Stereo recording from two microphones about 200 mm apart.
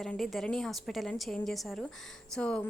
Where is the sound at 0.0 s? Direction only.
Centre (ahead or behind).